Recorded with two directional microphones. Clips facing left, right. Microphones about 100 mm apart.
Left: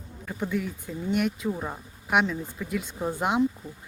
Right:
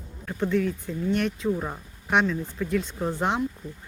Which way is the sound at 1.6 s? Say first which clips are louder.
Right 2 dB; centre (ahead or behind).